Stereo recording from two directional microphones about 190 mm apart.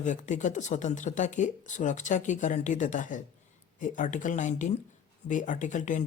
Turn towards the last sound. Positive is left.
turn(degrees=40)  # may be behind; listen again after turning